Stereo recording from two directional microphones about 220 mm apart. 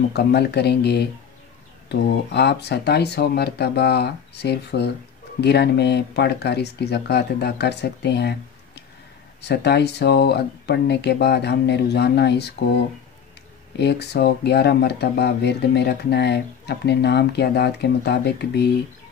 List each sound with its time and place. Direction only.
0.1 s speech: 50° left (ahead or behind)